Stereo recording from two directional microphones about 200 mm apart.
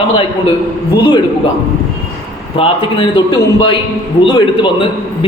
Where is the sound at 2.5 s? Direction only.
25° left (ahead or behind).